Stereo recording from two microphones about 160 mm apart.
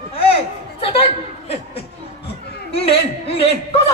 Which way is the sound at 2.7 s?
40° left (ahead or behind).